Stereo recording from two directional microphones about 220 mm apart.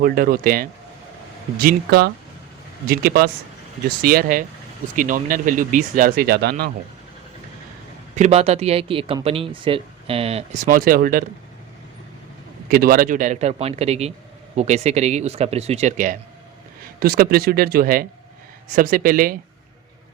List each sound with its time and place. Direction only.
0.0 s speech: 40° right (ahead or behind)
8.1 s speech: 30° right (ahead or behind)
12.6 s speech: 40° right (ahead or behind)